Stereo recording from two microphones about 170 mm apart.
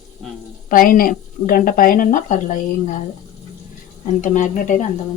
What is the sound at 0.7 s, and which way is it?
Speech, 55° left (ahead or behind).